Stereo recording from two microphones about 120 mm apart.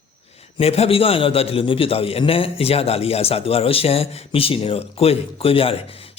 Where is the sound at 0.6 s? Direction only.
55° left (ahead or behind).